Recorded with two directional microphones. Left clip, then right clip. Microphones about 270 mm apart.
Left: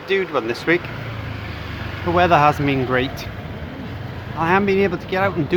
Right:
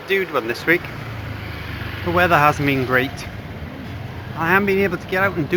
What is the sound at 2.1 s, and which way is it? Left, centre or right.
Speech, left.